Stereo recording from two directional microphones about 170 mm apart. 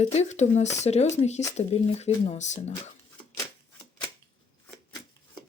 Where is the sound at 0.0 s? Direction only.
40° left (ahead or behind).